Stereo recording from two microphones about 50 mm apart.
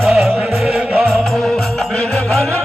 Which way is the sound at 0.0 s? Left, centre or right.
Centre.